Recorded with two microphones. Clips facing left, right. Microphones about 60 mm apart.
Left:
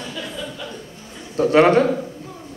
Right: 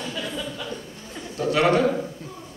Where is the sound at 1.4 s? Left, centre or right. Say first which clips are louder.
Left 6 dB; left.